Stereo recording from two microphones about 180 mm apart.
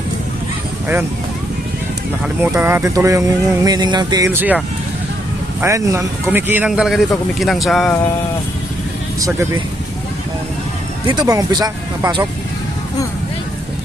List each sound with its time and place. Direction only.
2.2 s speech: 10° right (ahead or behind)
4.3 s a man's voice: 10° right (ahead or behind)
9.2 s speech: 15° right (ahead or behind)
11.0 s speech: 25° right (ahead or behind)